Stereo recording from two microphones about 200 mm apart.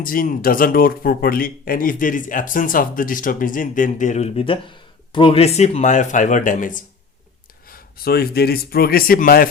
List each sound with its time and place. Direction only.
0.0 s speech: 45° left (ahead or behind)